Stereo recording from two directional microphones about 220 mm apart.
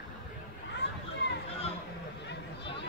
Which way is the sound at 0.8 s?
50° left (ahead or behind).